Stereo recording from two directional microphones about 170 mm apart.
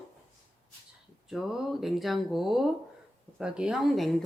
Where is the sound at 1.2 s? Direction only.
Centre (ahead or behind).